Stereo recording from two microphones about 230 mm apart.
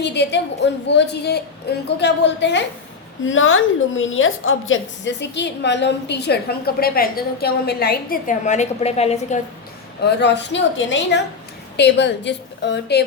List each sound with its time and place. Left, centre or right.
0.0 s a woman's voice: left
10.0 s a woman's voice: left